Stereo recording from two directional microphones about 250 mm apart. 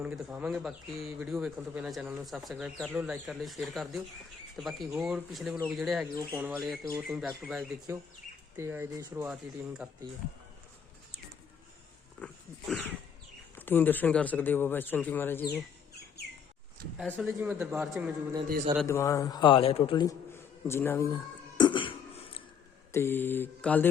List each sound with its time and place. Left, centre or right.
0.0 s speech: centre
12.2 s dog: centre
13.6 s a man's voice: centre
17.0 s speech: centre
18.4 s a man's voice: right
18.8 s a man's voice: centre
21.6 s cough: centre
22.9 s a man's voice: centre